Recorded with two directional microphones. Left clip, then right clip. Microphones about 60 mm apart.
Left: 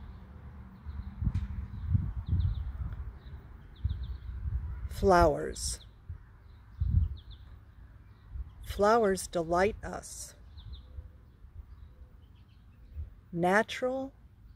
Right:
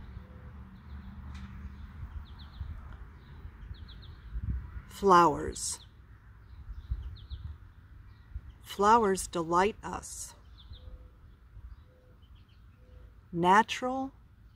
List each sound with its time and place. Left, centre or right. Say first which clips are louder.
4.8 s speech: right 2 dB; right
8.6 s speech: right 1 dB; right
13.4 s speech: right 3 dB; right